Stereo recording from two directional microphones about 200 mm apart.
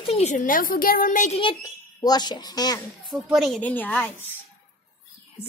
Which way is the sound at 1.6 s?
20° left (ahead or behind).